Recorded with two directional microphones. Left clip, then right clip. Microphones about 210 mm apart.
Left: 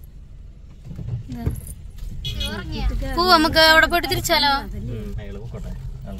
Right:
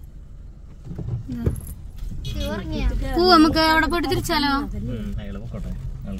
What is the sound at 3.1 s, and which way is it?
Speech, centre (ahead or behind).